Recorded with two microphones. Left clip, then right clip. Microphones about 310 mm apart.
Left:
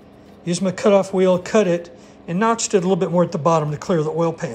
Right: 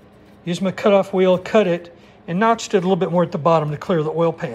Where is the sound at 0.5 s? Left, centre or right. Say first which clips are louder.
Even; centre.